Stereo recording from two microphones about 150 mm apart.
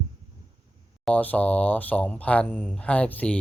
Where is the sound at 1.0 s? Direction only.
10° left (ahead or behind).